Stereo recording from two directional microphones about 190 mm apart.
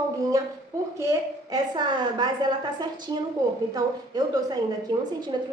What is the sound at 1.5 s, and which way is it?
Speech, 20° right (ahead or behind).